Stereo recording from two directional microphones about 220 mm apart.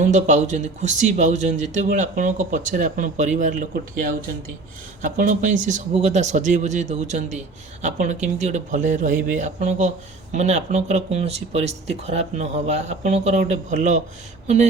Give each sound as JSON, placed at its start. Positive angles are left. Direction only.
{"t": 0.0, "sound": "speech", "side_deg": -35}